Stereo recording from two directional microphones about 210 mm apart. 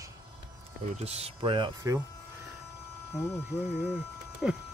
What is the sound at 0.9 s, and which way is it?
Speech, 30° right (ahead or behind).